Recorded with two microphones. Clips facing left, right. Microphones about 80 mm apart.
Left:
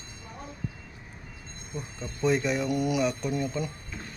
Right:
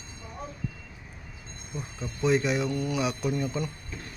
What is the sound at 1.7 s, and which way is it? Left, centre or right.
Speech, centre.